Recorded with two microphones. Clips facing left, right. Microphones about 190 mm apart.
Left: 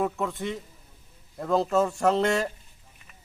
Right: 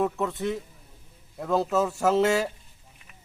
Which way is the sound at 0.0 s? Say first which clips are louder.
Right 2 dB; centre (ahead or behind).